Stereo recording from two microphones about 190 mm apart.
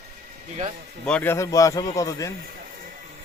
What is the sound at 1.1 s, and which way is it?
A man's voice, 10° left (ahead or behind).